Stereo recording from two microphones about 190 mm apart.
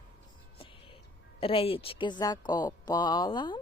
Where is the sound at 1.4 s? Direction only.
30° left (ahead or behind).